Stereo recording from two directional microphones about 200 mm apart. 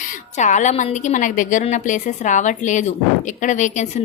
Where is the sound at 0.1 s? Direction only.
35° left (ahead or behind).